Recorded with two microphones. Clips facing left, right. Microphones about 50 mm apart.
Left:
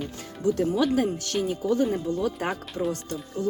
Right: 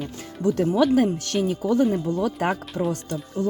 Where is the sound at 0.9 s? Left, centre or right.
Right.